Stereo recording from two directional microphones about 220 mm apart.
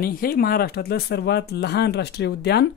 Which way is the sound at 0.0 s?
40° left (ahead or behind).